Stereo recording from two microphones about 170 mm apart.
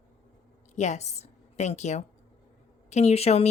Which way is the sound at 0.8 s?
40° left (ahead or behind).